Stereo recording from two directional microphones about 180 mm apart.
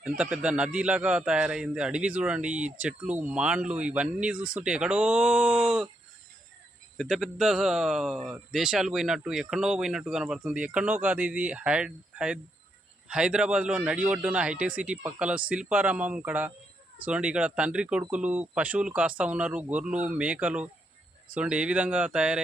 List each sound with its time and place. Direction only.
0.2 s a man's voice: 5° right (ahead or behind)
6.9 s a man's voice: centre (ahead or behind)